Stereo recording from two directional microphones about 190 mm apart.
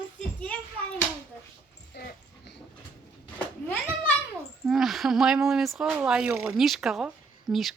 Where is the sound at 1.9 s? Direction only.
60° left (ahead or behind).